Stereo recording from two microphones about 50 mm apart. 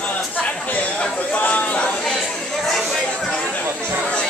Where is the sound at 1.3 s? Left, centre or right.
Left.